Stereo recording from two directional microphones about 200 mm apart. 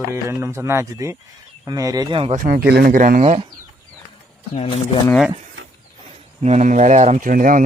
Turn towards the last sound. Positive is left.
turn(degrees=-40)  # may be behind; listen again after turning